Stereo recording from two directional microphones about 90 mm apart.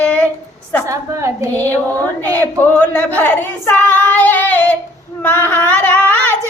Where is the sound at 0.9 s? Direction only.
35° right (ahead or behind).